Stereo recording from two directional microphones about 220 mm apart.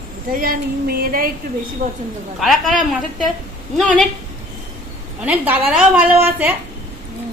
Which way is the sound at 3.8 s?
Centre (ahead or behind).